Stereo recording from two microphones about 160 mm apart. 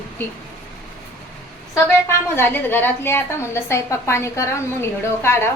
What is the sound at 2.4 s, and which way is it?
A woman's voice, 10° left (ahead or behind).